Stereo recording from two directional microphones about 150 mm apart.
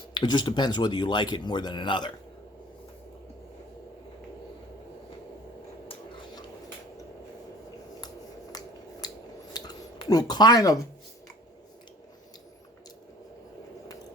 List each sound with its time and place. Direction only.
0.1 s speech: 30° left (ahead or behind)
9.0 s scissors: 25° left (ahead or behind)
9.5 s a sound: 25° left (ahead or behind)